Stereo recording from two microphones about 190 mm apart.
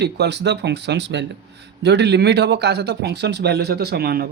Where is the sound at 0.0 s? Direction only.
65° right (ahead or behind).